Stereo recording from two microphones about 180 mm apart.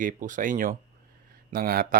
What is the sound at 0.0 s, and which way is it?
Speech, 45° right (ahead or behind).